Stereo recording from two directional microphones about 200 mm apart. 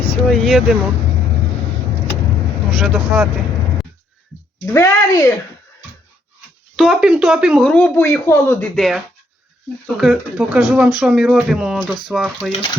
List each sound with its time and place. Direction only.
0.2 s speech: centre (ahead or behind)
2.6 s speech: centre (ahead or behind)
4.6 s speech: 15° left (ahead or behind)
6.7 s speech: centre (ahead or behind)